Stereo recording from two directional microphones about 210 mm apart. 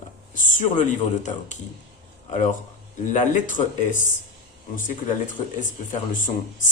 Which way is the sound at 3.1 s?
35° left (ahead or behind).